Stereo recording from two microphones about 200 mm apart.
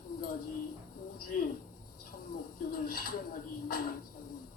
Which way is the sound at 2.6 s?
45° left (ahead or behind).